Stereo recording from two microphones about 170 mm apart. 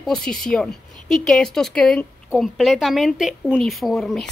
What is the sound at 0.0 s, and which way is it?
Speech, 5° left (ahead or behind).